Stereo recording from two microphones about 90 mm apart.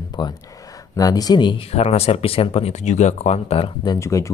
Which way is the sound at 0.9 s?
45° left (ahead or behind).